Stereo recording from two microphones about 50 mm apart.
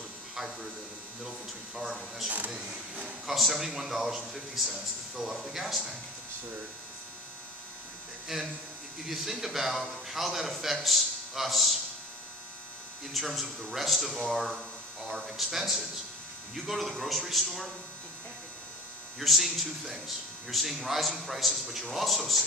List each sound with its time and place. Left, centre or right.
1.9 s a man's voice: centre
2.2 s speech: right
3.3 s a man's voice: centre
8.3 s a man's voice: centre
13.1 s a man's voice: centre
19.1 s a man's voice: centre